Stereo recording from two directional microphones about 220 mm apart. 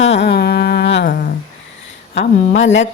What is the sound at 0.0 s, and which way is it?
Humming, 55° left (ahead or behind).